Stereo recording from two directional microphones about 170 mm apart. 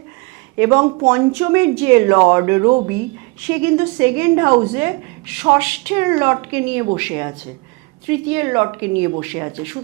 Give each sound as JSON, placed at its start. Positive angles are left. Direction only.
{"t": 0.6, "sound": "a woman's voice", "side_deg": -15}
{"t": 0.9, "sound": "speech", "side_deg": -30}
{"t": 1.5, "sound": "a woman's voice", "side_deg": -15}